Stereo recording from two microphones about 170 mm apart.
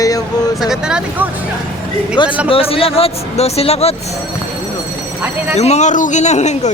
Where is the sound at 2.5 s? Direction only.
35° left (ahead or behind).